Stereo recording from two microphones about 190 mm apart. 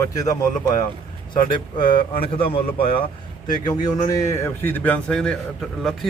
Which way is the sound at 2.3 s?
30° left (ahead or behind).